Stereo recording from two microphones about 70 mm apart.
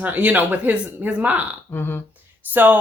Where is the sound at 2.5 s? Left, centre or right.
Right.